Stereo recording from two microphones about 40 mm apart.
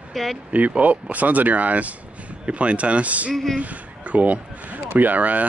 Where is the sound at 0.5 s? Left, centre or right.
Right.